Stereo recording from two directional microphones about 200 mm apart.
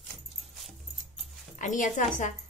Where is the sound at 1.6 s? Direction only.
40° left (ahead or behind).